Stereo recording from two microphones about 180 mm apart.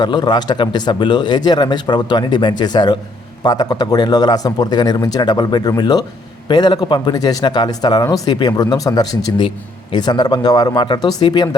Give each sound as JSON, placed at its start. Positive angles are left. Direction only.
{"t": 0.0, "sound": "a man's voice", "side_deg": 25}